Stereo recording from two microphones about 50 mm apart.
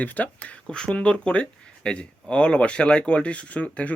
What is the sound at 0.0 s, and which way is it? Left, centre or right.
Speech, left.